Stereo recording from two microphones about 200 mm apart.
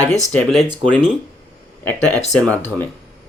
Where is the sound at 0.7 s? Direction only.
25° right (ahead or behind).